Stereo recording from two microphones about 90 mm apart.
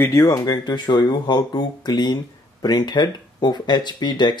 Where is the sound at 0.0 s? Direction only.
35° left (ahead or behind).